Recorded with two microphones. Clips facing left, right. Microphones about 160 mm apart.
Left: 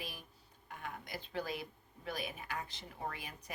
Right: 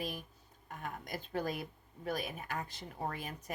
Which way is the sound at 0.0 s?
45° right (ahead or behind).